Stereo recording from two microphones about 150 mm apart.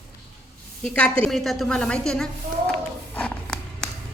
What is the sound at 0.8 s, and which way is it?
A woman's voice, 5° left (ahead or behind).